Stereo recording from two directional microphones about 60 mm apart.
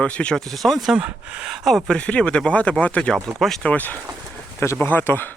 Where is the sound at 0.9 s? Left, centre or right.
Centre.